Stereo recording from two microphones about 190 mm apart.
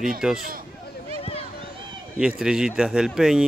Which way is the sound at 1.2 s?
30° left (ahead or behind).